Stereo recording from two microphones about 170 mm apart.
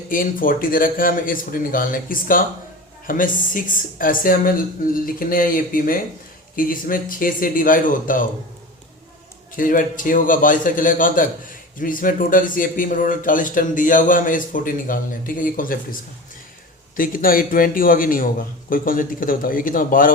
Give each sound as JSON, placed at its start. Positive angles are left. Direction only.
{"t": 0.1, "sound": "speech", "side_deg": 55}
{"t": 9.6, "sound": "speech", "side_deg": 50}
{"t": 17.0, "sound": "speech", "side_deg": 55}